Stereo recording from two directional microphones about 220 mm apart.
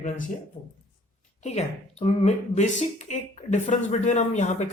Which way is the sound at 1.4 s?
30° left (ahead or behind).